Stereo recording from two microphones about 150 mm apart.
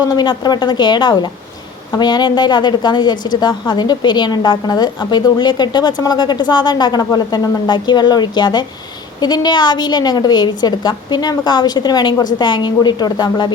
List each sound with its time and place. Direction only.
0.0 s a woman's voice: 25° left (ahead or behind)